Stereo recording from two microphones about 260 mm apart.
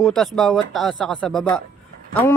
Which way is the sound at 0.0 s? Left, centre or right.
Centre.